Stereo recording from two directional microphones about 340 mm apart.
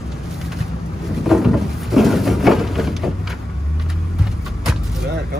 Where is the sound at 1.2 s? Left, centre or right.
Centre.